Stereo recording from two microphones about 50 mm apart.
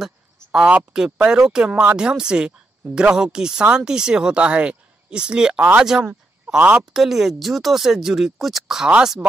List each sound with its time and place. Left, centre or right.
0.0 s a sound: centre
0.9 s speech: centre
5.6 s speech: right
6.9 s speech: centre